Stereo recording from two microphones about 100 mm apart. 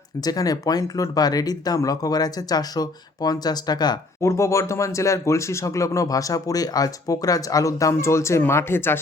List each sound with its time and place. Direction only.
0.3 s speech: 40° left (ahead or behind)
4.2 s speech: 30° left (ahead or behind)